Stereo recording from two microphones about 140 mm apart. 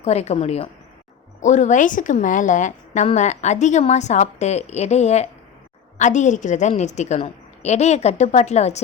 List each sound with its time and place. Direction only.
0.0 s a woman's voice: 50° left (ahead or behind)
1.4 s a woman's voice: 60° left (ahead or behind)